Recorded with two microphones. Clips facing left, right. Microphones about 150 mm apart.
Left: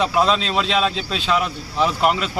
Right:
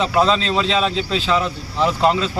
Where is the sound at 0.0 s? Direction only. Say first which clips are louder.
Right 1 dB; 10° left (ahead or behind).